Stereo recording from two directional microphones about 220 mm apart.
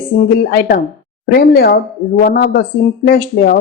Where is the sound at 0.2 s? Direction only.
40° left (ahead or behind).